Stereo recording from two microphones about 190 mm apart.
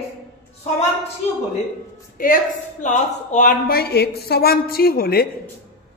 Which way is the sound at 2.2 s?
45° left (ahead or behind).